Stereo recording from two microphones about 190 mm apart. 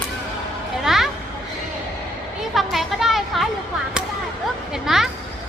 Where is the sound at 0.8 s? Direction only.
Centre (ahead or behind).